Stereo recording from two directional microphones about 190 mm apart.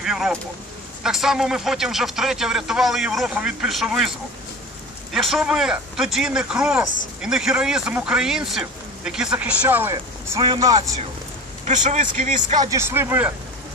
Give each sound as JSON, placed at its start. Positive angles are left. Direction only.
{"t": 0.0, "sound": "speech", "side_deg": 0}
{"t": 5.1, "sound": "speech", "side_deg": 0}
{"t": 11.6, "sound": "a man's voice", "side_deg": -40}
{"t": 12.5, "sound": "speech", "side_deg": -15}